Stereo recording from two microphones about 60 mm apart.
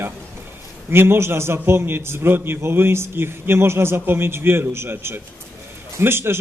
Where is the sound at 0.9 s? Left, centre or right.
Right.